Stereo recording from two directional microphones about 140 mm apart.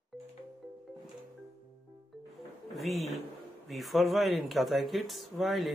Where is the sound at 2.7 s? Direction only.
Centre (ahead or behind).